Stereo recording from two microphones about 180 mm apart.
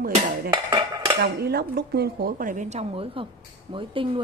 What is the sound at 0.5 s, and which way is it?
Dishes, 25° right (ahead or behind).